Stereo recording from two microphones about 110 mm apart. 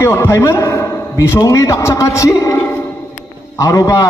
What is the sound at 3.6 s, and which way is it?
Speech, 30° left (ahead or behind).